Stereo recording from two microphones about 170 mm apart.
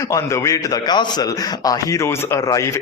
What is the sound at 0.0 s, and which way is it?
A man's voice, 20° left (ahead or behind).